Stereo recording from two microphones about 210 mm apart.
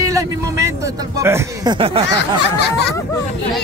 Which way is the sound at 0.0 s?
15° right (ahead or behind).